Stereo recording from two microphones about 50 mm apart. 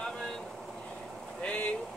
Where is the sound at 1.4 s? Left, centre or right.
Left.